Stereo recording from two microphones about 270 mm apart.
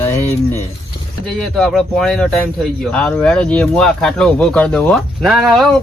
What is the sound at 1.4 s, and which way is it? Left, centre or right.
Speech, centre.